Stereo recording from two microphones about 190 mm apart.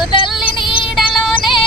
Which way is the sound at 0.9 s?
Centre (ahead or behind).